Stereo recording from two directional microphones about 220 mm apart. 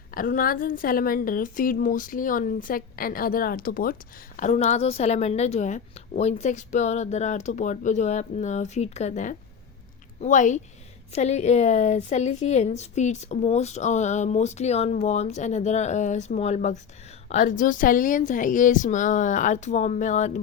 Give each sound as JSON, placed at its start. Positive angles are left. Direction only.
{"t": 0.1, "sound": "a woman's voice", "side_deg": 40}